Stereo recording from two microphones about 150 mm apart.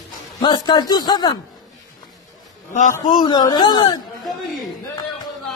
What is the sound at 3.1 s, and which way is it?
Speech, 30° left (ahead or behind).